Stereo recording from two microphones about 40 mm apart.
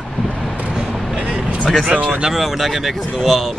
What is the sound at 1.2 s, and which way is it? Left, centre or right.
Vehicle, right.